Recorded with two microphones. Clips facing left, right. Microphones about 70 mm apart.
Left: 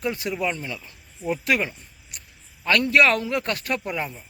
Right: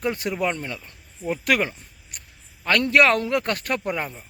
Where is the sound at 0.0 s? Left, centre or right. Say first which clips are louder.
Right 1 dB; right.